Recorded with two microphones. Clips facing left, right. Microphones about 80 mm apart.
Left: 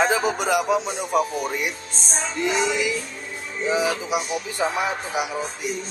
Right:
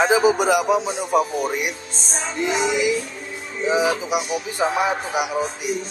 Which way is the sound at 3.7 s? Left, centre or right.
Centre.